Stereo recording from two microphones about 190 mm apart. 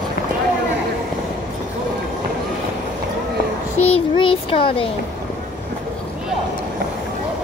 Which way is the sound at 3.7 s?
30° left (ahead or behind).